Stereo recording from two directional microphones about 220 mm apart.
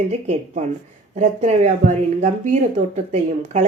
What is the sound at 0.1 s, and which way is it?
A woman's voice, 30° right (ahead or behind).